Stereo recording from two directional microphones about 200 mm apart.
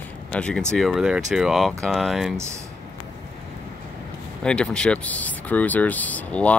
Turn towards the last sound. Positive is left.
turn(degrees=5)  # may be behind; listen again after turning